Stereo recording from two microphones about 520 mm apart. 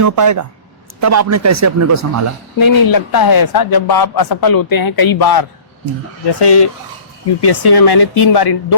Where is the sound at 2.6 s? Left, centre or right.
Left.